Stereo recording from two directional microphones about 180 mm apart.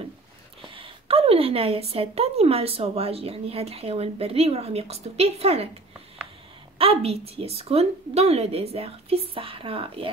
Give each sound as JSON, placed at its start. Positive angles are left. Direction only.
{"t": 0.6, "sound": "a woman's voice", "side_deg": -30}
{"t": 6.8, "sound": "a woman's voice", "side_deg": -35}